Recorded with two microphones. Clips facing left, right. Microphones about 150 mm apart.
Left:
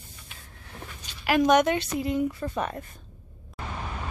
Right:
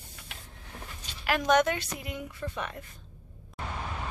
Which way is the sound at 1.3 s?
15° left (ahead or behind).